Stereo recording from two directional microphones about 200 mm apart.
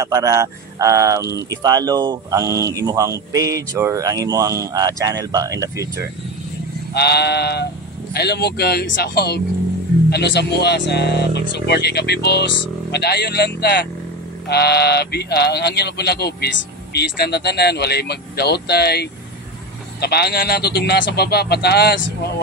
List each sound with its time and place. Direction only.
0.0 s speech: 15° right (ahead or behind)
6.9 s speech: 55° left (ahead or behind)